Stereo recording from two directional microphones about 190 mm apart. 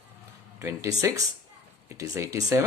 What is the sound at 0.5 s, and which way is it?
Speech, 15° right (ahead or behind).